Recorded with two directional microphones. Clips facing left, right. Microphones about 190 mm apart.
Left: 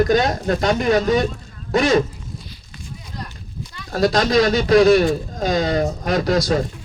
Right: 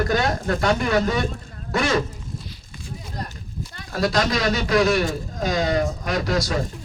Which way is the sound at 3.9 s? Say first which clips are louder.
Left 6 dB; 35° left (ahead or behind).